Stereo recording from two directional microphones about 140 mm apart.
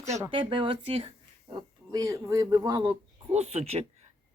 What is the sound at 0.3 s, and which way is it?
Speech, 40° right (ahead or behind).